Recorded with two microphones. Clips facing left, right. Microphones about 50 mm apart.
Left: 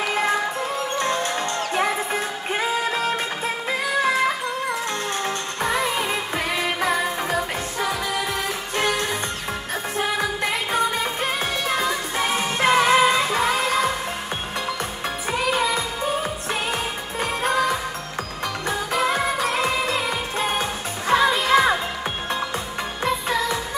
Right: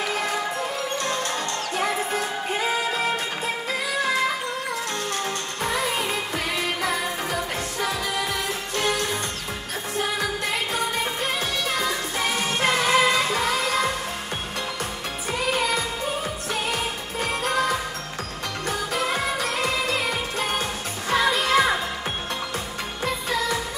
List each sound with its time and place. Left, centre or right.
0.9 s music: left
5.2 s music: left
8.7 s music: left
15.5 s music: left